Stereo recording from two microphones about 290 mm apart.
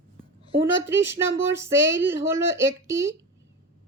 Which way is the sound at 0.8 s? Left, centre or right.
Centre.